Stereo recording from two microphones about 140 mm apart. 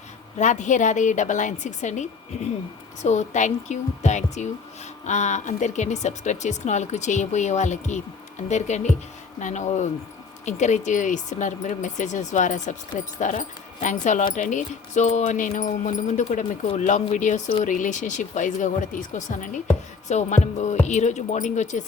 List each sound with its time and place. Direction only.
0.3 s speech: 60° left (ahead or behind)
20.1 s speech: 55° left (ahead or behind)